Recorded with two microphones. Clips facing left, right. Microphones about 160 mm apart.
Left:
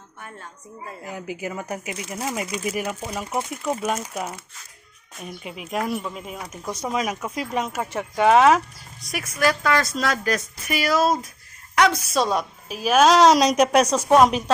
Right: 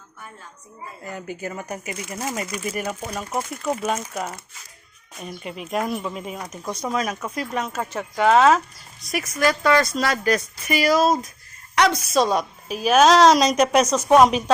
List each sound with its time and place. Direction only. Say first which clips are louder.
1.0 s speech: even; 5° left (ahead or behind)
9.1 s speech: right 1 dB; centre (ahead or behind)
13.5 s speech: even; centre (ahead or behind)